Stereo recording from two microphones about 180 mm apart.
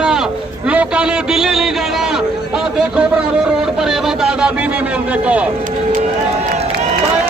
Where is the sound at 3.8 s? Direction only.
Centre (ahead or behind).